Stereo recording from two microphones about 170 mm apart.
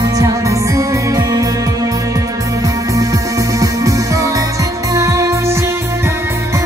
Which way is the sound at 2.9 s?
20° right (ahead or behind).